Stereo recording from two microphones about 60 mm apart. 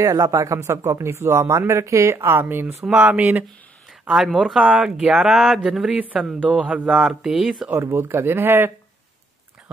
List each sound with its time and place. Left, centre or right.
0.0 s speech: right
0.6 s speech: right
2.8 s speech: centre
4.1 s speech: centre
6.5 s speech: right
6.9 s speech: centre
7.7 s speech: right